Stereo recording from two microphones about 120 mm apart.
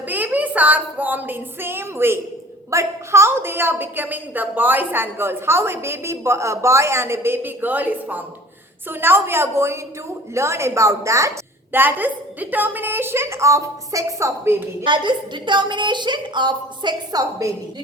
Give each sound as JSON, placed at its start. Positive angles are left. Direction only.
{"t": 0.1, "sound": "a woman's voice", "side_deg": -15}
{"t": 14.8, "sound": "a woman's voice", "side_deg": -40}